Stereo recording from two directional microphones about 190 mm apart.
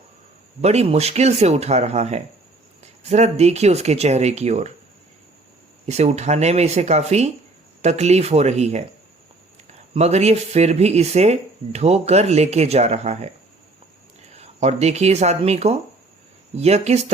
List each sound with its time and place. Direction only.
0.6 s speech: 35° right (ahead or behind)
5.8 s speech: 35° right (ahead or behind)
14.3 s speech: 35° right (ahead or behind)